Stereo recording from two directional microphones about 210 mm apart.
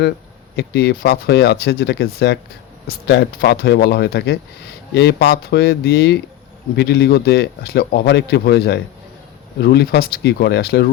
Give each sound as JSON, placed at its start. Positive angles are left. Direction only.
{"t": 0.5, "sound": "speech", "side_deg": 55}